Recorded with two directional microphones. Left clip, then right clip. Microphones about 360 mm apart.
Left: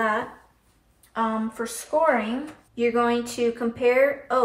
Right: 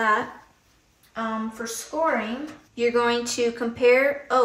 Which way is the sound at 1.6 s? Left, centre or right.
Centre.